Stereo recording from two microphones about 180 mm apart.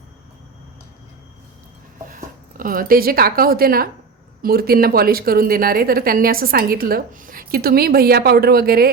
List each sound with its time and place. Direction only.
2.1 s a woman's voice: 50° right (ahead or behind)